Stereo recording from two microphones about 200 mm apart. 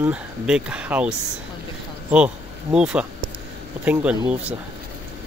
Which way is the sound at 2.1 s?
5° right (ahead or behind).